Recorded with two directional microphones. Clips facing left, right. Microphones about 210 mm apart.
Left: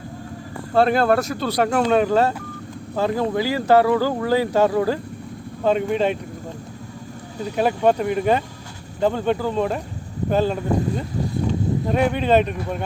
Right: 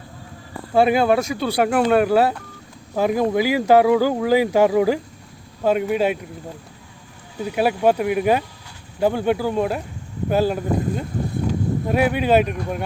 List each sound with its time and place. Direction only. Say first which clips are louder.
0.7 s speech: right 1 dB; 10° right (ahead or behind)
7.3 s speech: right 1 dB; 5° right (ahead or behind)